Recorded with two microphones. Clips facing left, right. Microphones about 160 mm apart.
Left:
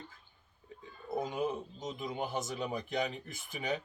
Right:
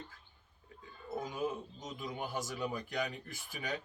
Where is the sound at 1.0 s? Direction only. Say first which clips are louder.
Left 3 dB; 20° left (ahead or behind).